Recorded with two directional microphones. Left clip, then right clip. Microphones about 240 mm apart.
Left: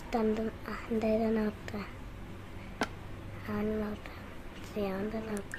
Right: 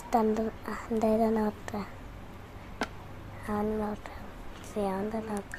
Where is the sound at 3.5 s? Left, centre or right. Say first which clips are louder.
Right 4 dB; centre.